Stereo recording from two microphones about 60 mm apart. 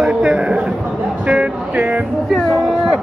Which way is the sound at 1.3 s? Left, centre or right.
Right.